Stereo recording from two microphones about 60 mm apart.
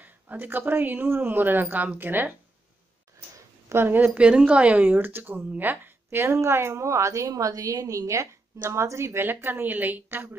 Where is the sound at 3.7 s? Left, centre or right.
Right.